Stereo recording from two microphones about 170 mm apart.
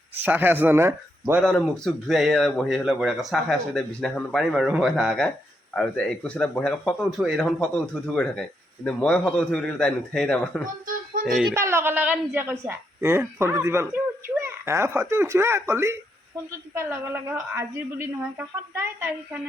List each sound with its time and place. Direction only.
0.3 s a woman's voice: 10° right (ahead or behind)
1.2 s speech: centre (ahead or behind)
10.8 s a sound: 55° right (ahead or behind)
11.3 s speech: centre (ahead or behind)
11.5 s a woman's voice: 15° right (ahead or behind)